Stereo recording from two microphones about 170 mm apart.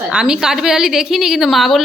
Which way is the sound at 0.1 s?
5° right (ahead or behind).